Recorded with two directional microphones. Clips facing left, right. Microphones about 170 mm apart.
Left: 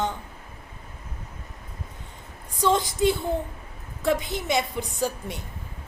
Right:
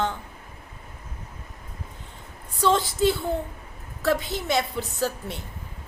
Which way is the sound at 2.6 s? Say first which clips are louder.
Right 1 dB; 15° left (ahead or behind).